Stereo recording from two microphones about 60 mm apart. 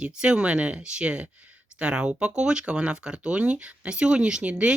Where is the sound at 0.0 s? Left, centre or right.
Centre.